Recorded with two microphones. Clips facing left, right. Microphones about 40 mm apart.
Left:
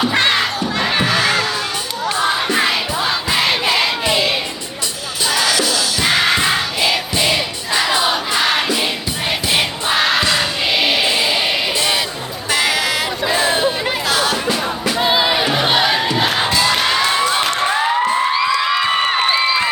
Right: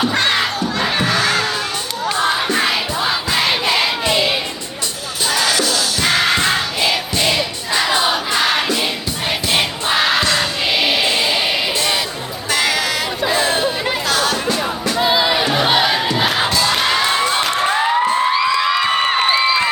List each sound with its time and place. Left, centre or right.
0.1 s crowd: centre
0.3 s crowd: centre
2.0 s music: centre
3.3 s crowd: centre
5.2 s music: centre
12.5 s a sound: centre
14.8 s crowd: centre
16.5 s crowd: centre
16.7 s a sound: centre
17.7 s music: centre